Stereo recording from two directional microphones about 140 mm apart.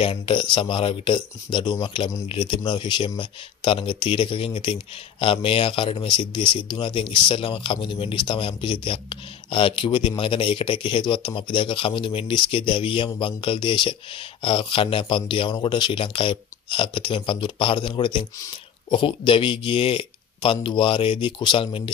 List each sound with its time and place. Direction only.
0.0 s a man's voice: 40° left (ahead or behind)